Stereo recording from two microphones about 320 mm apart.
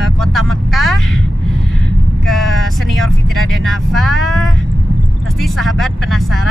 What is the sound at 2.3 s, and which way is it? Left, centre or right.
Speech, centre.